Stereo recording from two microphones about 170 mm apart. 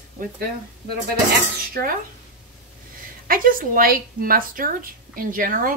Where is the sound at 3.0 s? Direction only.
55° right (ahead or behind).